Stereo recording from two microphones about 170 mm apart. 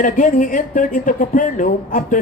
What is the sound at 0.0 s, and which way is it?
A man's voice, 50° left (ahead or behind).